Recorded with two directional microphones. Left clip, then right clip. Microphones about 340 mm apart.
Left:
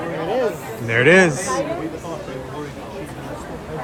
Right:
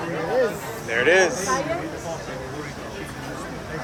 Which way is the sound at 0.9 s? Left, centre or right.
Centre.